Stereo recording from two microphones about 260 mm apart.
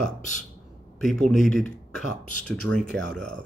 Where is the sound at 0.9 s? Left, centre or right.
Centre.